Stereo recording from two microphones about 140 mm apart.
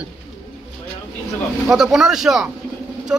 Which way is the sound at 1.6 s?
5° right (ahead or behind).